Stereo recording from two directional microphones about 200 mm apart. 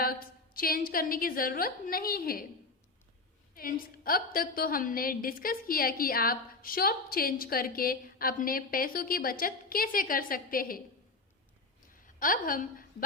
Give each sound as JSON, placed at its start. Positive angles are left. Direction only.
{"t": 0.0, "sound": "a woman's voice", "side_deg": 50}
{"t": 3.5, "sound": "a woman's voice", "side_deg": 45}
{"t": 12.0, "sound": "a woman's voice", "side_deg": 45}